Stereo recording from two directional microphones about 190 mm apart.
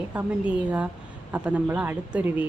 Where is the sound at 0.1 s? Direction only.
5° right (ahead or behind).